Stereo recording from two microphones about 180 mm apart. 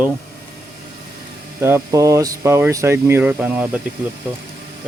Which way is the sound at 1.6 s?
15° right (ahead or behind).